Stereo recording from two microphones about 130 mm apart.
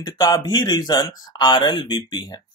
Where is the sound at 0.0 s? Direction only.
30° left (ahead or behind).